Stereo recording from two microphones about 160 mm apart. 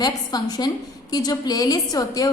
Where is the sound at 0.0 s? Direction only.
25° left (ahead or behind).